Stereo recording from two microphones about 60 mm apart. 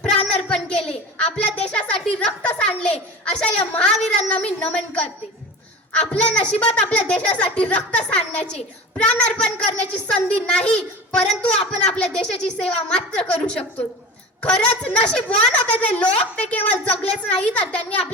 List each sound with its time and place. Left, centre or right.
0.0 s child singing: centre
1.4 s music: left
3.8 s a woman's voice: centre